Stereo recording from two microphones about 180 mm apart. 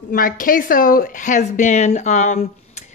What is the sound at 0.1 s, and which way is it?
A woman's voice, 50° left (ahead or behind).